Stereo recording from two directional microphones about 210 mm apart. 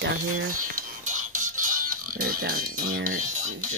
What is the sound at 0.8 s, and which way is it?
Music, 40° right (ahead or behind).